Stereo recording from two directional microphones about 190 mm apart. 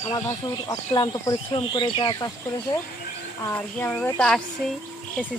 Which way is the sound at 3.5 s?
10° left (ahead or behind).